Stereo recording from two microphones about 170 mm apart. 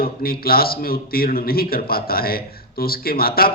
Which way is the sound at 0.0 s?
60° left (ahead or behind).